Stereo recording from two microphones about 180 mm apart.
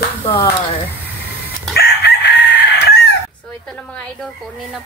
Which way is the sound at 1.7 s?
65° left (ahead or behind).